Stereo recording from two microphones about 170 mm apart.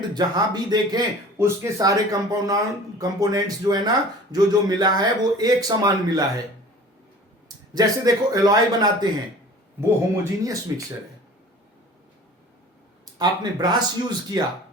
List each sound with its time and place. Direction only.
0.1 s a man's voice: 25° right (ahead or behind)
7.4 s speech: 25° right (ahead or behind)
10.4 s a man's voice: 20° right (ahead or behind)
13.1 s a man's voice: 25° right (ahead or behind)